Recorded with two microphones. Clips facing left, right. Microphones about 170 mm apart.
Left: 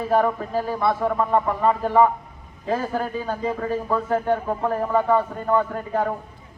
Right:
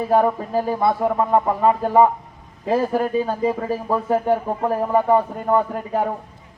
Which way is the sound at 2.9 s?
10° right (ahead or behind).